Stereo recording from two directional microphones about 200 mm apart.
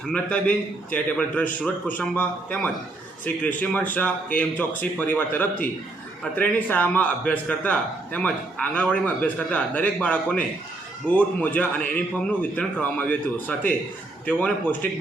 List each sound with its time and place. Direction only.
0.1 s a man's voice: 5° left (ahead or behind)